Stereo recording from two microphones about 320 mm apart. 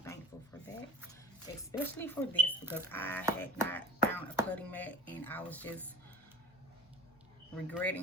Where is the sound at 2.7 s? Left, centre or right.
Centre.